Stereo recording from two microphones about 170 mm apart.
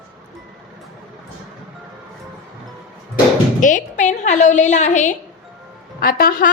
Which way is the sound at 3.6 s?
50° left (ahead or behind).